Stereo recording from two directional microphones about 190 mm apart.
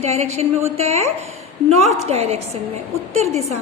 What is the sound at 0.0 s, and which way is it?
A woman's voice, 35° right (ahead or behind).